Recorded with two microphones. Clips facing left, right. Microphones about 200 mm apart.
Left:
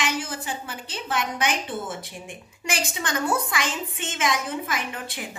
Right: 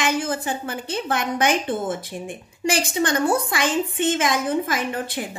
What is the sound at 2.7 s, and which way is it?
Speech, 35° right (ahead or behind).